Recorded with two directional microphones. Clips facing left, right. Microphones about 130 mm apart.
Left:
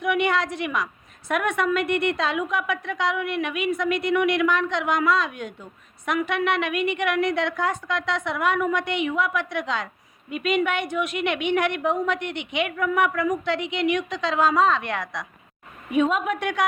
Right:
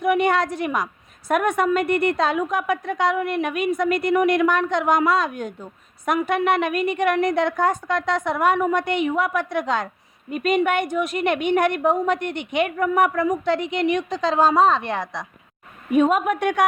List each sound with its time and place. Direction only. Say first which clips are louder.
0.0 s a woman's voice: right 4 dB; 40° right (ahead or behind)
15.9 s a woman's voice: right 4 dB; 50° right (ahead or behind)